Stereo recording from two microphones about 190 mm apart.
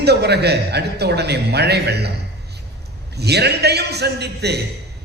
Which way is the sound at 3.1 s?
60° right (ahead or behind).